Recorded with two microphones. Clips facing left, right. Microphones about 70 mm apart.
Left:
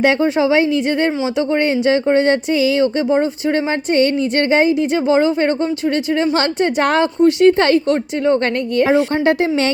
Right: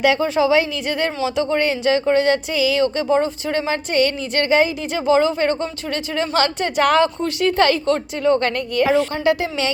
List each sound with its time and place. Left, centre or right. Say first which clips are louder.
0.0 s speech: left 2 dB; left
9.2 s speech: left 4 dB; left